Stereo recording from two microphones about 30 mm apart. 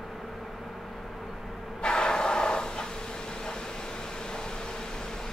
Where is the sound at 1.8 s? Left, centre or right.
Left.